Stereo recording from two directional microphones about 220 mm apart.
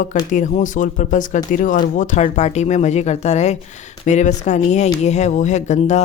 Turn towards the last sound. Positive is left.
turn(degrees=35)  # may be behind; listen again after turning